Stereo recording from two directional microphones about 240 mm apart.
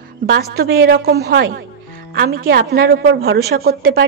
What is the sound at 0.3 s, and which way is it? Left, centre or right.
A woman's voice, right.